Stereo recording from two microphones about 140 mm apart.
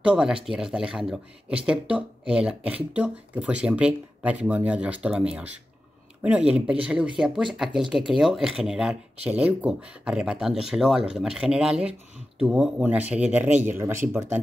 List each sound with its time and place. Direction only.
0.0 s speech: 5° right (ahead or behind)